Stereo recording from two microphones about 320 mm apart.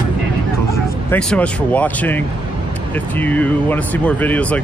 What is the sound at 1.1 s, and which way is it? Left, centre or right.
Speech, centre.